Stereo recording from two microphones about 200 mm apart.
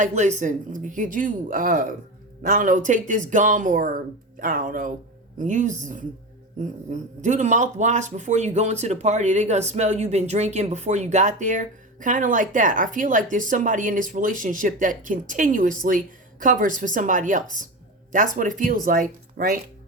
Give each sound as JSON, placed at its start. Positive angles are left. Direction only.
{"t": 0.0, "sound": "speech", "side_deg": -35}